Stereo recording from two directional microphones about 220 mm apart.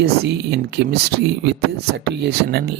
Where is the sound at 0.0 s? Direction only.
50° right (ahead or behind).